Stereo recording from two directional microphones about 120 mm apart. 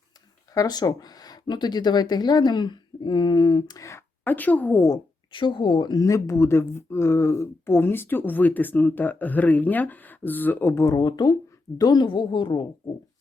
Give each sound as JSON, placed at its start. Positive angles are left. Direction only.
{"t": 0.5, "sound": "speech", "side_deg": 30}
{"t": 5.3, "sound": "speech", "side_deg": 45}